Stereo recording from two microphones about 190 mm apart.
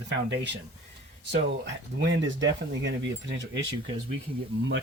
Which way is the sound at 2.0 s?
70° right (ahead or behind).